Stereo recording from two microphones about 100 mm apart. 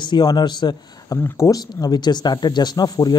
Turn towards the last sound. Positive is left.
turn(degrees=40)  # may be behind; listen again after turning